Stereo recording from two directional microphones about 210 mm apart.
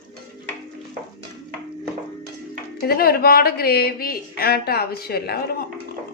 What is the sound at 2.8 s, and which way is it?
Speech, 45° left (ahead or behind).